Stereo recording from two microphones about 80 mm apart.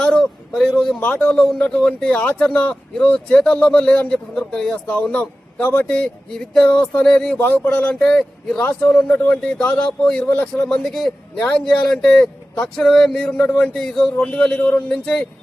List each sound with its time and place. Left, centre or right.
0.0 s a sound: centre
1.0 s a man's voice: centre
1.3 s a man's voice: centre
7.3 s speech: left
8.0 s a man's voice: centre